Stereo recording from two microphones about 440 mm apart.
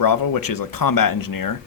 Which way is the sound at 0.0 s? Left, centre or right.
Left.